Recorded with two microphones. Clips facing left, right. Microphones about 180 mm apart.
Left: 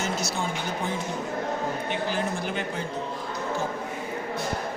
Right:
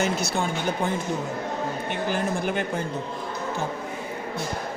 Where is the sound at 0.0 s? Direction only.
60° right (ahead or behind).